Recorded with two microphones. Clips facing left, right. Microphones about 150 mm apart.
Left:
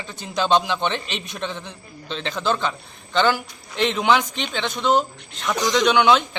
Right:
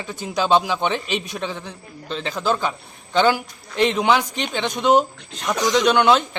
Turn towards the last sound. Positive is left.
turn(degrees=-5)  # may be behind; listen again after turning